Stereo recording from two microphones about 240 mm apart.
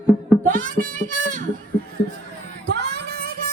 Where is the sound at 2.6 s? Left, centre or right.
Right.